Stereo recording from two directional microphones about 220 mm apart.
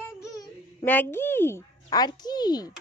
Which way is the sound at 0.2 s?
10° left (ahead or behind).